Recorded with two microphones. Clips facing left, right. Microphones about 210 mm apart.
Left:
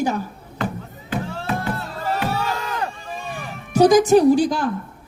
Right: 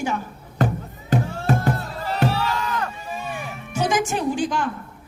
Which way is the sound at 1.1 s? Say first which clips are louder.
Right 3 dB; 45° right (ahead or behind).